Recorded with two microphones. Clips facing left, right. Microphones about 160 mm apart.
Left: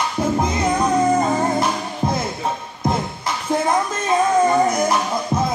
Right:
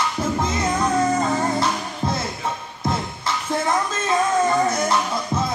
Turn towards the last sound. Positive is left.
turn(degrees=15)  # may be behind; listen again after turning